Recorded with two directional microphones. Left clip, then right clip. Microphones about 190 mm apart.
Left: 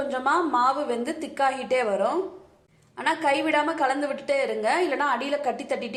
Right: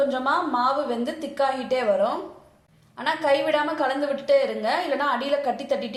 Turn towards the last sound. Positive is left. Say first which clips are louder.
# right 2 dB
turn(degrees=25)  # may be behind; listen again after turning